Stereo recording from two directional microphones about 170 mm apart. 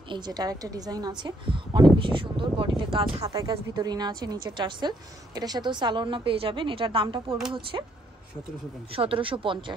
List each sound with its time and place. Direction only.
0.1 s a woman's voice: 25° right (ahead or behind)
8.9 s speech: 30° right (ahead or behind)